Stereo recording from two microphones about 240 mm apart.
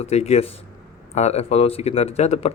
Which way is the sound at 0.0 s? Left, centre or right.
Left.